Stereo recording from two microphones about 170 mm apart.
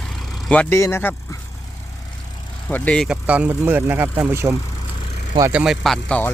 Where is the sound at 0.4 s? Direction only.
5° left (ahead or behind).